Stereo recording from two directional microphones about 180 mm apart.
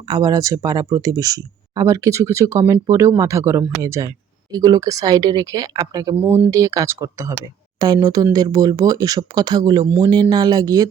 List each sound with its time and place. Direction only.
0.1 s speech: 20° right (ahead or behind)